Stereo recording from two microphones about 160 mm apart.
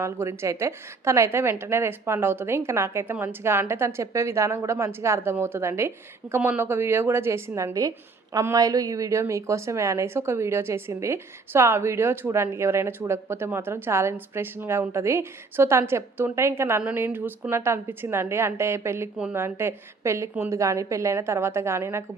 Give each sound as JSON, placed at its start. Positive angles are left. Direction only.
{"t": 0.0, "sound": "a woman's voice", "side_deg": -15}